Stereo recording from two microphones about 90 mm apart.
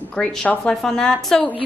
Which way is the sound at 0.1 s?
10° left (ahead or behind).